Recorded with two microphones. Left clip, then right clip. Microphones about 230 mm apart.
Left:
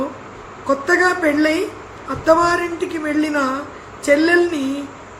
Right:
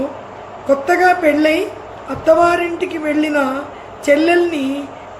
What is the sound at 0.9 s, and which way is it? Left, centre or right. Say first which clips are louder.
Speech: right 3 dB; centre.